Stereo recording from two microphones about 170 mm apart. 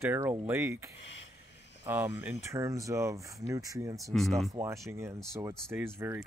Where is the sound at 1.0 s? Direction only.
90° left.